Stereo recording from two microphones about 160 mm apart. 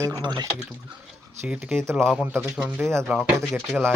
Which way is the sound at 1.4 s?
5° right (ahead or behind).